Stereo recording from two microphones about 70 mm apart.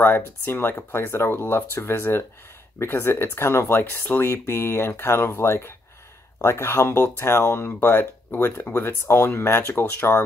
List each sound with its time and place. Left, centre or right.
0.0 s speech: left